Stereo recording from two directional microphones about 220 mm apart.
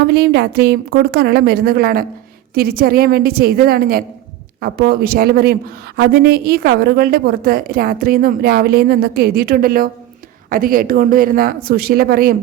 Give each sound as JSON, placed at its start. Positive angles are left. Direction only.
{"t": 0.1, "sound": "a woman's voice", "side_deg": -45}